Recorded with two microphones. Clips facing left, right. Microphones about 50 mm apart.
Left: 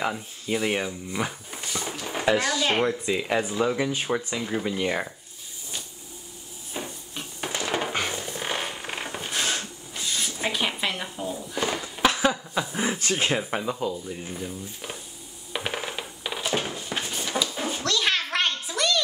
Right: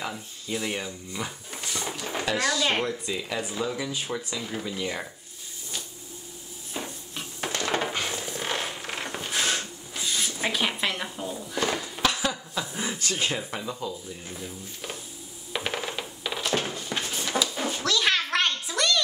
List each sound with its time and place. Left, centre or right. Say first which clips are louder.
0.5 s speech: left 5 dB; centre
1.5 s dog: left 1 dB; centre
2.2 s speech: left 3 dB; left
4.4 s speech: left 5 dB; centre
4.6 s speech: left 5 dB; left
6.7 s a sound: left 1 dB; centre
8.1 s zipper: even; centre
12.0 s a sound: left 6 dB; left
12.7 s speech: left 4 dB; left
14.4 s stir: left 3 dB; centre
15.5 s coin: even; centre
17.6 s a sound: even; centre